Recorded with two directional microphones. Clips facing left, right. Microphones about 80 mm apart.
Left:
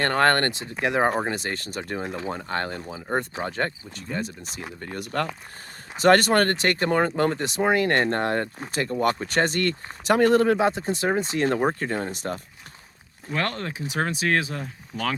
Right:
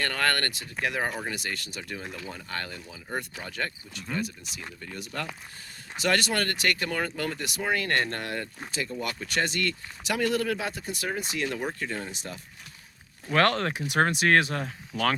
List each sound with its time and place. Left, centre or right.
0.0 s speech: left
1.1 s speech: left
4.8 s speech: left
6.0 s speech: left
8.7 s speech: left
13.3 s speech: right